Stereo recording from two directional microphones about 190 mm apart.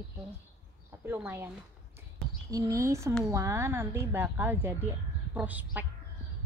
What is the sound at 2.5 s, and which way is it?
Speech, 15° right (ahead or behind).